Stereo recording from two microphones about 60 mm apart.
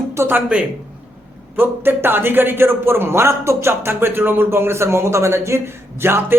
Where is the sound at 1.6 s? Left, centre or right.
Right.